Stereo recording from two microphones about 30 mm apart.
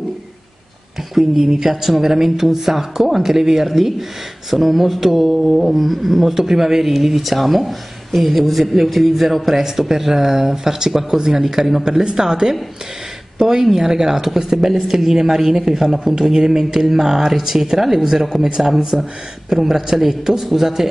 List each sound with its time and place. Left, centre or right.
1.3 s speech: centre
4.5 s mantra: centre
8.4 s speech: centre
11.8 s speech: right
18.9 s mantra: centre
19.5 s speech: centre